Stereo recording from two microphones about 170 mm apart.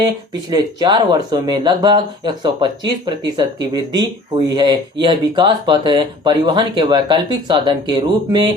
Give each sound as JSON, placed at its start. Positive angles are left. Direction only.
{"t": 0.5, "sound": "speech", "side_deg": -25}